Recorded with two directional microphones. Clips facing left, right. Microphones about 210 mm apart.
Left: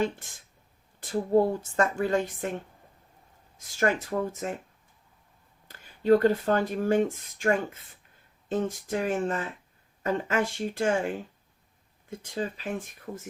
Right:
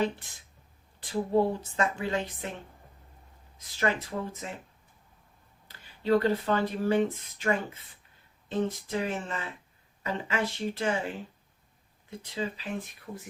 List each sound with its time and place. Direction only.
0.9 s speech: 45° left (ahead or behind)
3.8 s speech: 50° left (ahead or behind)
5.6 s speech: 45° left (ahead or behind)
12.2 s speech: 45° left (ahead or behind)